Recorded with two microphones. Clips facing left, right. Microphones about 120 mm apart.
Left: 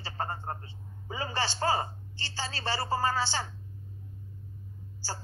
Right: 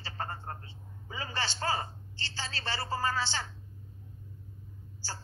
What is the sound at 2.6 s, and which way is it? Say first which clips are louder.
Speech: left 4 dB; 35° left (ahead or behind).